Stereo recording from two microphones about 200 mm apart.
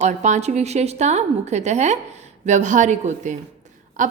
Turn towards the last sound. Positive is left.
turn(degrees=-40)  # may be behind; listen again after turning